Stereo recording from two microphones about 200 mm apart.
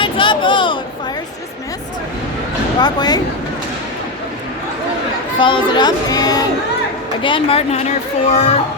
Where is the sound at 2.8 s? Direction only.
20° left (ahead or behind).